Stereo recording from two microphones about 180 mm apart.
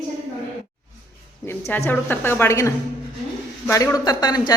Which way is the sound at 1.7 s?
10° left (ahead or behind).